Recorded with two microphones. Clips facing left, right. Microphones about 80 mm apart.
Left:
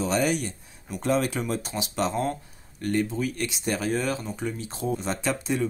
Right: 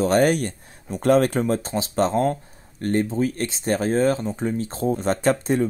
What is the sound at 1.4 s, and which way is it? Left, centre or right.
Speech, right.